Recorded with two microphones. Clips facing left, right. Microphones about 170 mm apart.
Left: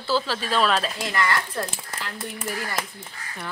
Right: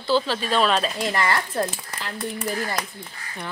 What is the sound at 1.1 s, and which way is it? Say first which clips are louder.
Speech: left 1 dB; 30° right (ahead or behind).